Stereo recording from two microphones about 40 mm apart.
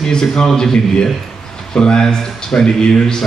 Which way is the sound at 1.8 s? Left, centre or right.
Centre.